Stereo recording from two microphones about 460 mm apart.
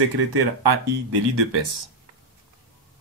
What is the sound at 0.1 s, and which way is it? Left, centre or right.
Speech, right.